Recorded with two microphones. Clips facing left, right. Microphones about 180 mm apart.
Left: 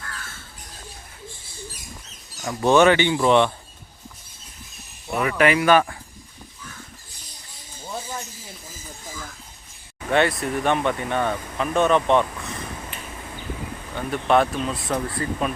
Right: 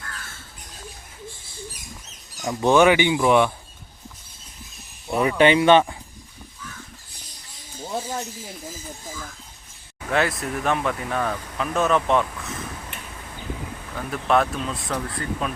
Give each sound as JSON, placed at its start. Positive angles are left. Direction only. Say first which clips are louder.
{"t": 2.3, "sound": "speech", "louder": "even", "side_deg": -15}
{"t": 5.1, "sound": "speech", "louder": "right 2 dB", "side_deg": -25}
{"t": 10.1, "sound": "speech", "louder": "left 3 dB", "side_deg": 0}
{"t": 13.9, "sound": "speech", "louder": "left 2 dB", "side_deg": 0}